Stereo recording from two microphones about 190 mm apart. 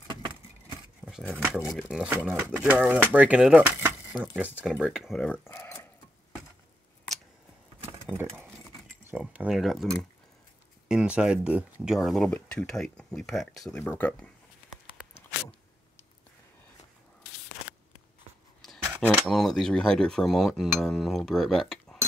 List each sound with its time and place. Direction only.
1.0 s a sound: 5° right (ahead or behind)
1.7 s speech: centre (ahead or behind)
7.8 s a sound: 10° right (ahead or behind)
9.0 s speech: 5° right (ahead or behind)
10.9 s speech: 5° right (ahead or behind)
18.6 s speech: centre (ahead or behind)